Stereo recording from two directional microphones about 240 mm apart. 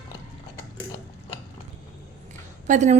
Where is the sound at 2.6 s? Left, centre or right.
Right.